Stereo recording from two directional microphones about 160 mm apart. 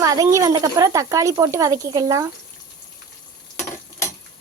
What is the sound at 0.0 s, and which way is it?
Speech, 20° right (ahead or behind).